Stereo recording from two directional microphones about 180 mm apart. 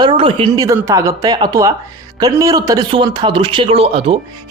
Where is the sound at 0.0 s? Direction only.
30° right (ahead or behind).